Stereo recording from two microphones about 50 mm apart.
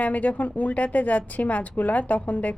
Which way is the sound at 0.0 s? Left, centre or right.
Left.